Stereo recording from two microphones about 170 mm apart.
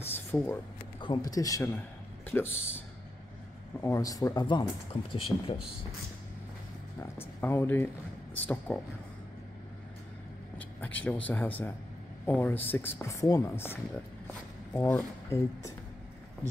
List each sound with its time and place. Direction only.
0.0 s a sound: 15° left (ahead or behind)
1.0 s speech: 25° left (ahead or behind)
3.8 s speech: 20° left (ahead or behind); by 5.6 s 35° left (ahead or behind)
7.0 s speech: 15° left (ahead or behind)
10.8 s speech: 10° left (ahead or behind)